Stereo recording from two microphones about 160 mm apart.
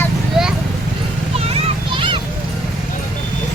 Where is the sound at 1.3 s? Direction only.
40° right (ahead or behind).